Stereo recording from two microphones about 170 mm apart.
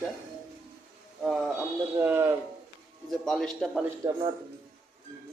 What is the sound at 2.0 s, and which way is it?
Speech, 15° right (ahead or behind).